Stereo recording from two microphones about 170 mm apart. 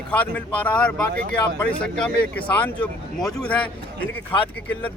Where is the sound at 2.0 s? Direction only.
10° left (ahead or behind).